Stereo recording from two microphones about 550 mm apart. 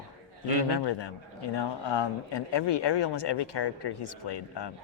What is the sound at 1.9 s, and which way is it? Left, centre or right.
Speech, left.